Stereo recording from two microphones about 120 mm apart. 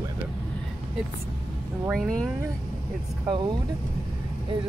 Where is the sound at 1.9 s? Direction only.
5° left (ahead or behind).